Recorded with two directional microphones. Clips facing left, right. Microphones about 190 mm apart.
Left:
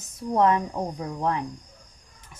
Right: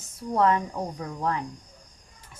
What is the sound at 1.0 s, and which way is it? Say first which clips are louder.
Speech: left 2 dB; 20° left (ahead or behind).